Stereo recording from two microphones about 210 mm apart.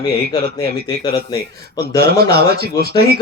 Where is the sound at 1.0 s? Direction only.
25° left (ahead or behind).